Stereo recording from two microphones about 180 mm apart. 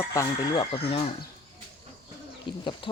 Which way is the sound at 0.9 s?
30° left (ahead or behind).